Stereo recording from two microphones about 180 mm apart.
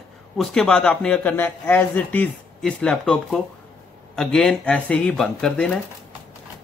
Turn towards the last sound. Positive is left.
turn(degrees=5)  # may be behind; listen again after turning